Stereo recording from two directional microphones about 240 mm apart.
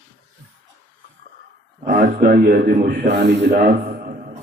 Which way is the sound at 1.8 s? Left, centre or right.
Right.